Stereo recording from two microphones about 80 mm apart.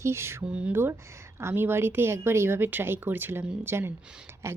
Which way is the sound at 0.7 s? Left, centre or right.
Right.